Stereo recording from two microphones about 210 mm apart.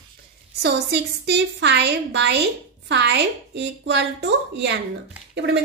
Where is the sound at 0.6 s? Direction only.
55° right (ahead or behind).